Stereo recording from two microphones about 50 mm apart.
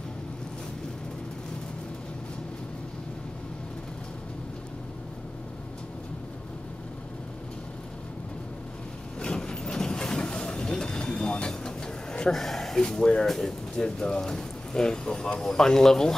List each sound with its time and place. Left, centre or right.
9.2 s vehicle: centre
12.8 s speech: centre